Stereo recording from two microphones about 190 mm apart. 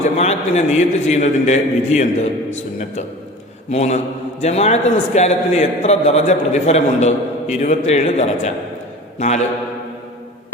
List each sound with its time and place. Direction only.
0.0 s a man's voice: 35° left (ahead or behind)
3.7 s a man's voice: 35° left (ahead or behind)